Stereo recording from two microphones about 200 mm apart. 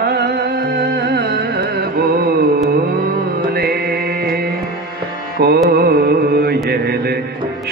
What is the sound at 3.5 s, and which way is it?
Music, 50° right (ahead or behind).